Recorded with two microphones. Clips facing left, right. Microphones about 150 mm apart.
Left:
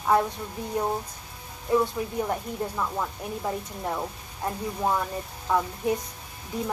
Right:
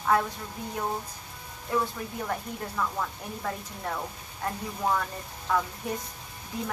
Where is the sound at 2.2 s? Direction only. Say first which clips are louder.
Left 2 dB; 20° left (ahead or behind).